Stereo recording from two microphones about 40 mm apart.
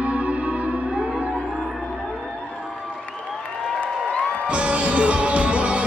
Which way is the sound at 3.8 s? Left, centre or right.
Left.